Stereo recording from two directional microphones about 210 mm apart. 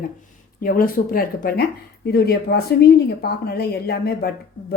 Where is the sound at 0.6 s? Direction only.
40° left (ahead or behind).